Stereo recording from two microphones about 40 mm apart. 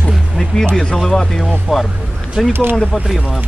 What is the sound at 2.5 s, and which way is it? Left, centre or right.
Speech, right.